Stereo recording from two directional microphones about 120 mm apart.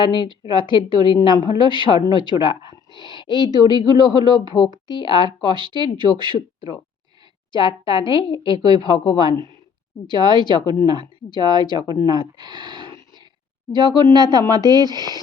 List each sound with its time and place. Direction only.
0.0 s speech: 40° left (ahead or behind)
8.4 s a woman's voice: 35° right (ahead or behind)
8.8 s speech: 40° left (ahead or behind)
12.7 s a sound: 40° left (ahead or behind)
13.7 s speech: 35° left (ahead or behind)